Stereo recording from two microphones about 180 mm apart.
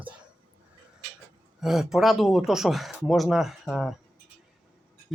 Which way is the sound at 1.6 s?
Centre (ahead or behind).